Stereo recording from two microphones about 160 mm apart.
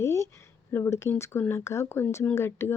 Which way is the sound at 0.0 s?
15° left (ahead or behind).